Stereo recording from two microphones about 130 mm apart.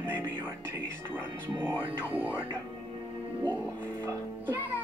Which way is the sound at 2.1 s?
15° right (ahead or behind).